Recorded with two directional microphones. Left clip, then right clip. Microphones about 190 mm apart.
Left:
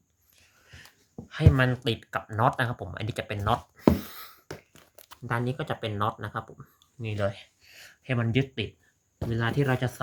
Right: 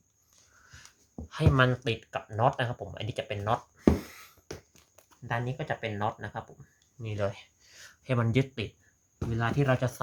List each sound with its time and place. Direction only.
0.3 s a sound: 5° left (ahead or behind); by 4.8 s 20° left (ahead or behind)
5.2 s speech: 20° left (ahead or behind); by 8.7 s 5° right (ahead or behind)
9.1 s speech: 15° left (ahead or behind)
9.6 s speech: centre (ahead or behind)